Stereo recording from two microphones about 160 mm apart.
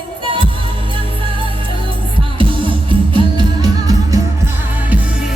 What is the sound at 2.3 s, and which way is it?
Music, 30° right (ahead or behind).